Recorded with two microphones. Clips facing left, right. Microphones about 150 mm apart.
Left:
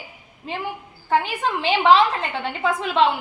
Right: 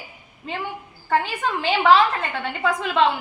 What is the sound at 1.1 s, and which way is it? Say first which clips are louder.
A woman's voice: left 1 dB; 20° left (ahead or behind).